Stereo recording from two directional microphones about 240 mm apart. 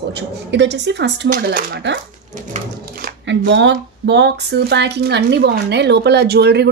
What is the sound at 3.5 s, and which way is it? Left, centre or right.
A woman's voice, right.